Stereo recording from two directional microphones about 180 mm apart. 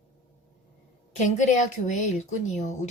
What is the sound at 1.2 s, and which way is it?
A woman's voice, 40° left (ahead or behind).